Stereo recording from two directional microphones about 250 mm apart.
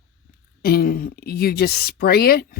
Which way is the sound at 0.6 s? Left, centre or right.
Left.